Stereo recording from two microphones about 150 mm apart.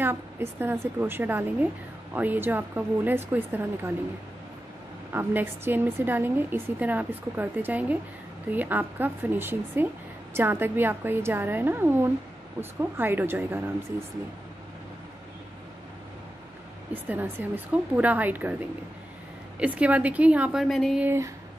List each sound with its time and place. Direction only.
0.0 s a woman's voice: 15° right (ahead or behind)
5.1 s a woman's voice: 15° right (ahead or behind)
16.9 s a woman's voice: 10° right (ahead or behind)
19.6 s a woman's voice: 10° right (ahead or behind)
21.0 s a woman's voice: 15° right (ahead or behind)